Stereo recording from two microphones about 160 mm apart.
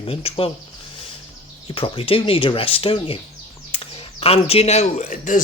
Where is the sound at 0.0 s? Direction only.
35° left (ahead or behind).